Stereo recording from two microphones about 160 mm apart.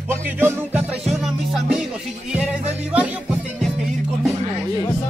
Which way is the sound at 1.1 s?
Centre (ahead or behind).